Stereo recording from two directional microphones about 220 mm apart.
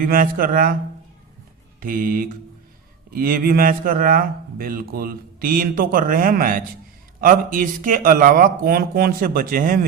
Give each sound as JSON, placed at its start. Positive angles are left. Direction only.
{"t": 0.0, "sound": "a man's voice", "side_deg": -40}
{"t": 1.8, "sound": "a man's voice", "side_deg": -40}